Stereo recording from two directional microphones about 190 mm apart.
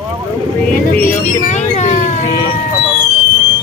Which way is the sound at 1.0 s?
40° left (ahead or behind).